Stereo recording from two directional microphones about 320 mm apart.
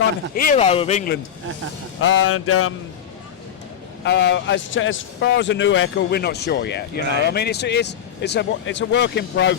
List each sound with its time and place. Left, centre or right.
0.3 s a man's voice: left
2.0 s a man's voice: left
4.0 s a man's voice: left